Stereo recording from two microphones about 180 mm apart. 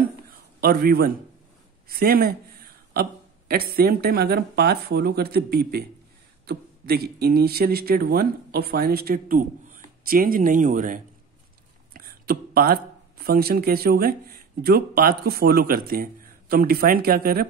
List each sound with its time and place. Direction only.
0.6 s a man's voice: 60° right (ahead or behind)
11.9 s a man's voice: 55° right (ahead or behind)